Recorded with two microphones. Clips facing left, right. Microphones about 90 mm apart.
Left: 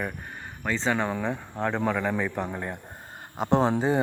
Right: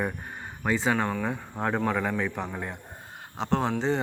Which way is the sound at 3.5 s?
15° left (ahead or behind).